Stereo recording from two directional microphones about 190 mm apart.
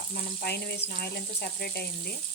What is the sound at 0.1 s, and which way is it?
Frying, 50° left (ahead or behind).